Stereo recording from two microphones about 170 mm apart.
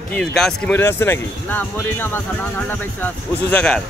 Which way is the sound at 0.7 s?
15° left (ahead or behind).